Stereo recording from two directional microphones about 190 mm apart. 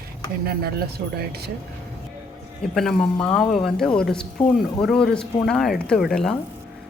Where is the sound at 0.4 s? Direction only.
55° right (ahead or behind).